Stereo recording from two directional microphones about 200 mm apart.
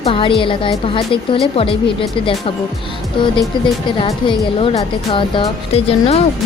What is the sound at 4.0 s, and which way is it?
A woman's voice, 25° left (ahead or behind).